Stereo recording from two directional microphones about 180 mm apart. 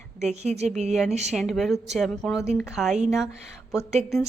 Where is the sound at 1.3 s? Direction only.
Centre (ahead or behind).